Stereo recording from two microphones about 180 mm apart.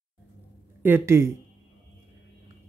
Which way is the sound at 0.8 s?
15° right (ahead or behind).